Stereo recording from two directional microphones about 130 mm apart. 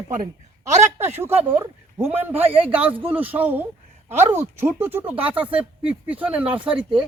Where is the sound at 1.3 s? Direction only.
55° right (ahead or behind).